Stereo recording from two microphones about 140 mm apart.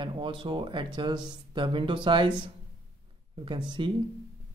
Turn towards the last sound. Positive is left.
turn(degrees=-35)  # may be behind; listen again after turning